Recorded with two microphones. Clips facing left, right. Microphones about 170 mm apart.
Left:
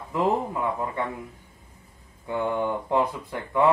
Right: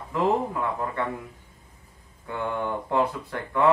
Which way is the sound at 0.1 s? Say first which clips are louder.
Even; 15° left (ahead or behind).